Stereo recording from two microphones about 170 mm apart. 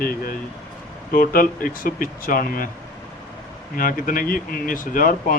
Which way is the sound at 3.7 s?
55° left (ahead or behind).